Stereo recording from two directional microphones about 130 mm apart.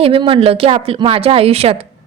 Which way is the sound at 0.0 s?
45° right (ahead or behind).